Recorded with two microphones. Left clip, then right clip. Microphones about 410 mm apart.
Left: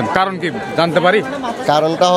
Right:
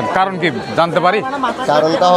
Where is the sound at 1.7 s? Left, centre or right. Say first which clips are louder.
Right 1 dB; left.